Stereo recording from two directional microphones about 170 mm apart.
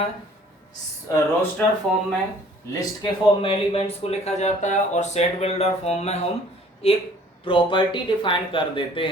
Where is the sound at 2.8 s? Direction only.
30° left (ahead or behind).